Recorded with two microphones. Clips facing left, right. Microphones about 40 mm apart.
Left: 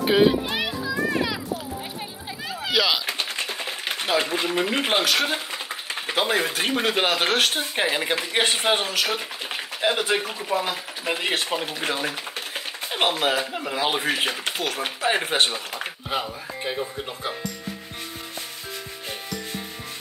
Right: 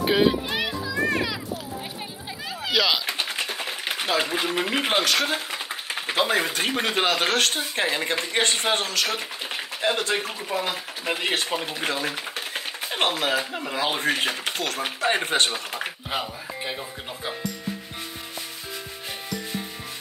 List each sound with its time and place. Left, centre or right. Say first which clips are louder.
0.0 s children playing: left 2 dB; centre
2.6 s speech: even; centre
11.9 s typewriter: even; centre
13.1 s speech: left 1 dB; centre